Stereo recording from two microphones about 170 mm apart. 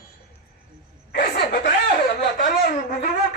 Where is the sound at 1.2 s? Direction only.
55° left (ahead or behind).